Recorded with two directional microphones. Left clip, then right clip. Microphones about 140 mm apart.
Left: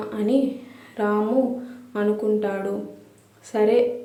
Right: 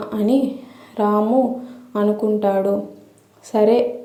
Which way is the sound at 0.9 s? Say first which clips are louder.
Right 5 dB; 30° right (ahead or behind).